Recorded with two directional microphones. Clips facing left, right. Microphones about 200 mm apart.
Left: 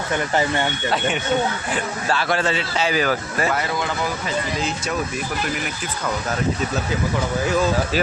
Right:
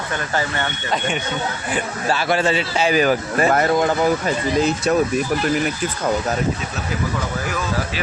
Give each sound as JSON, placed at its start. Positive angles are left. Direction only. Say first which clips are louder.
{"t": 1.7, "sound": "a man's voice", "louder": "right 1 dB", "side_deg": -10}
{"t": 3.5, "sound": "speech", "louder": "right 7 dB", "side_deg": -45}